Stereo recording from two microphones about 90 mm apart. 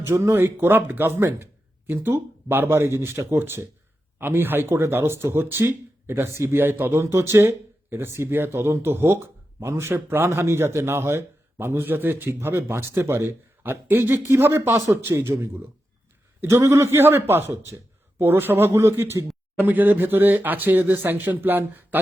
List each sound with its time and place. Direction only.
0.0 s speech: 30° right (ahead or behind)
19.5 s speech: 20° right (ahead or behind)